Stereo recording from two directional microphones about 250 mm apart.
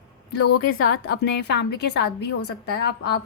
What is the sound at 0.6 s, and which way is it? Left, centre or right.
A woman's voice, left.